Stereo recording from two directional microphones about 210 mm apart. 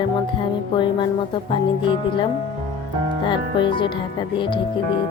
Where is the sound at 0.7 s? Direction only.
20° left (ahead or behind).